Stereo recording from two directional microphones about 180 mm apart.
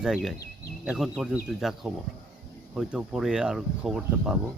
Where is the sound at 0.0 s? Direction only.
Centre (ahead or behind).